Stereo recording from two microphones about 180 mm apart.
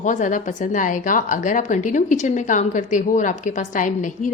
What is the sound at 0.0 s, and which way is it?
A woman's voice, 45° left (ahead or behind).